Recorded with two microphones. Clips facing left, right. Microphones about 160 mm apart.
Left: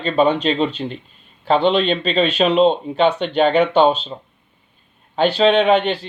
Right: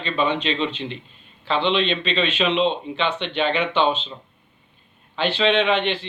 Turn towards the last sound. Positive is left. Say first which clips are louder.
# left 5 dB
turn(degrees=40)  # may be behind; listen again after turning